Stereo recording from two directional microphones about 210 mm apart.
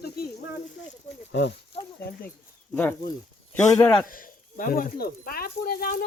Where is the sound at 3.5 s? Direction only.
10° left (ahead or behind).